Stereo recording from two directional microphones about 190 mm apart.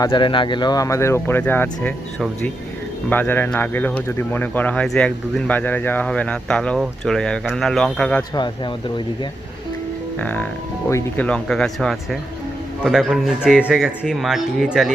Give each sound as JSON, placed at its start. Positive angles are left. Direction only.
{"t": 0.0, "sound": "a man's voice", "side_deg": 25}
{"t": 10.2, "sound": "a man's voice", "side_deg": 10}